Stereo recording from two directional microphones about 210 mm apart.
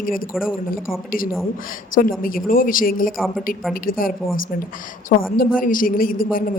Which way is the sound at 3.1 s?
Centre (ahead or behind).